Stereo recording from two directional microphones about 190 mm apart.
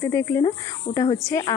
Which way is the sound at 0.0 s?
15° left (ahead or behind).